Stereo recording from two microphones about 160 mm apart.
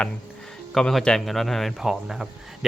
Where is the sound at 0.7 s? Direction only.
Centre (ahead or behind).